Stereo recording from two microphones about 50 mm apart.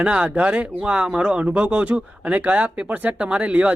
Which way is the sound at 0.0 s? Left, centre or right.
Right.